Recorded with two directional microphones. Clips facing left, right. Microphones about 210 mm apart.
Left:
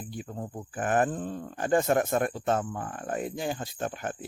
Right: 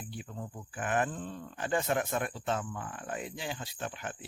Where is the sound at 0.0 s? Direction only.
45° left (ahead or behind).